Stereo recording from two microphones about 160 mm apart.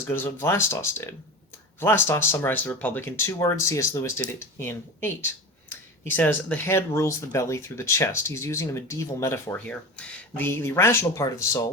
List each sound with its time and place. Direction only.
0.0 s speech: 15° left (ahead or behind)